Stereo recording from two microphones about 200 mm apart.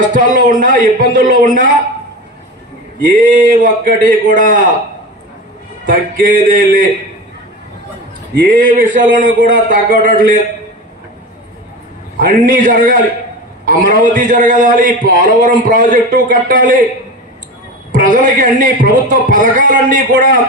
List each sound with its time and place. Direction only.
0.1 s a man's voice: 40° right (ahead or behind)
3.0 s a man's voice: 45° right (ahead or behind)
5.9 s a man's voice: 45° right (ahead or behind)
8.4 s a man's voice: 45° right (ahead or behind)
12.2 s a man's voice: 45° right (ahead or behind)
17.9 s a man's voice: 40° right (ahead or behind)